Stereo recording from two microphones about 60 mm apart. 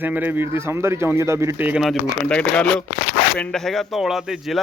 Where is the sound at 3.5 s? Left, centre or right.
Centre.